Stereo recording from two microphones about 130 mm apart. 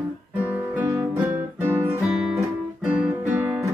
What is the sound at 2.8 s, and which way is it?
Guitar, 5° right (ahead or behind).